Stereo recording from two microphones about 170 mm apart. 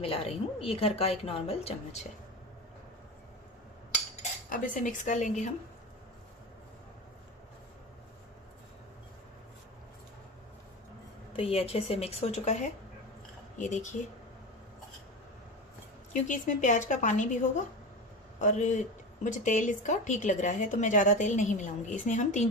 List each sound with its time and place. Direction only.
0.0 s a woman's voice: 35° left (ahead or behind)
4.2 s cutlery: 55° left (ahead or behind)
11.3 s a woman's voice: 35° left (ahead or behind)
16.2 s speech: 45° left (ahead or behind)
18.3 s speech: 45° left (ahead or behind)